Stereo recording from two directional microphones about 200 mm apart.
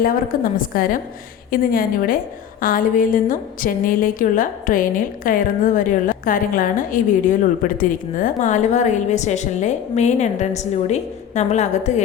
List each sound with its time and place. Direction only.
0.0 s a woman's voice: 45° left (ahead or behind)